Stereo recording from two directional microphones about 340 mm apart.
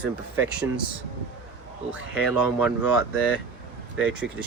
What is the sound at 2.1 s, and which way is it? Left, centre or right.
Speech, centre.